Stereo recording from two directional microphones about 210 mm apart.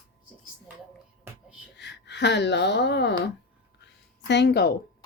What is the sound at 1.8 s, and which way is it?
Speech, 55° left (ahead or behind).